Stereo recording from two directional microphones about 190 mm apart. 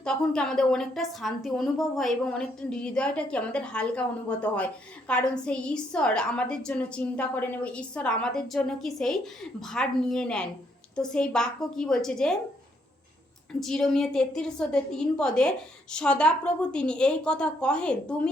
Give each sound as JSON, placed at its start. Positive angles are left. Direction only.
{"t": 0.0, "sound": "a woman's voice", "side_deg": 5}
{"t": 13.5, "sound": "a woman's voice", "side_deg": 5}